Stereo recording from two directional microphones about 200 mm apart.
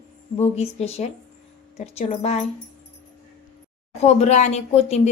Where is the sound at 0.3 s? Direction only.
30° left (ahead or behind).